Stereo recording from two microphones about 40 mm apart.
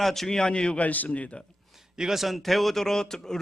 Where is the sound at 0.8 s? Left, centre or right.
Left.